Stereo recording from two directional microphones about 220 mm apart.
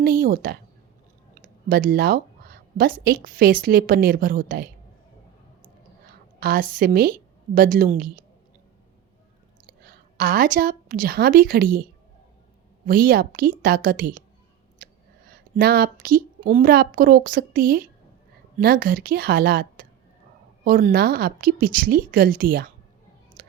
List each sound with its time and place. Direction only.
0.0 s speech: 40° right (ahead or behind)
5.6 s a sound: 45° right (ahead or behind)
7.5 s speech: 40° right (ahead or behind)
9.6 s a woman's voice: 40° right (ahead or behind)
12.9 s speech: 40° right (ahead or behind)
14.8 s a sound: 40° right (ahead or behind)
16.0 s a woman's voice: 40° right (ahead or behind)
23.4 s clicking: 40° right (ahead or behind)